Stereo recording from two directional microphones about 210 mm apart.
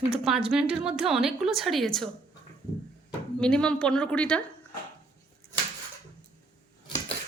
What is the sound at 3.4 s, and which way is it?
A woman's voice, 5° left (ahead or behind).